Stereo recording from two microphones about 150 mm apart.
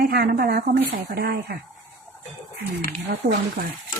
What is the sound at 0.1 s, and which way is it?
A woman's voice, 90° right.